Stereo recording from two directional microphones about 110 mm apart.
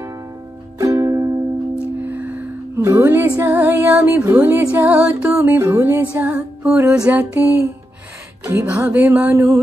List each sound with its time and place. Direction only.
0.7 s music: 30° right (ahead or behind)
2.0 s music: 15° right (ahead or behind)
8.9 s music: 15° right (ahead or behind)